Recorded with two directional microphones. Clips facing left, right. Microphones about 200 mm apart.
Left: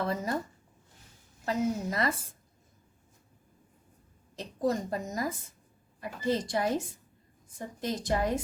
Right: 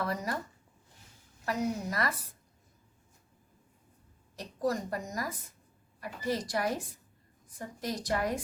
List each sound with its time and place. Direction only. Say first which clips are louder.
0.0 s a woman's voice: left 2 dB; 25° left (ahead or behind)
1.5 s a woman's voice: left 3 dB; 25° left (ahead or behind)
4.4 s a woman's voice: left 2 dB; 25° left (ahead or behind)